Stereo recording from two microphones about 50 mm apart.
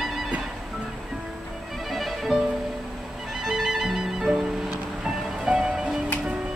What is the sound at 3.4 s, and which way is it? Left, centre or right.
Music, centre.